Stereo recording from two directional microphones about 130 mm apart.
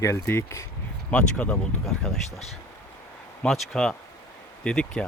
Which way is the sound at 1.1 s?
10° left (ahead or behind).